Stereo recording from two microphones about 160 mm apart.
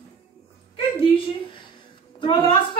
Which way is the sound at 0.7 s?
35° left (ahead or behind).